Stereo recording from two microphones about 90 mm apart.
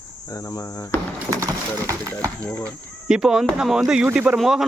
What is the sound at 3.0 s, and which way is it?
Speech, 10° right (ahead or behind).